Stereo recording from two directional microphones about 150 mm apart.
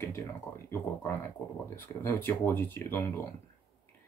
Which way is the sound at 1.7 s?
15° left (ahead or behind).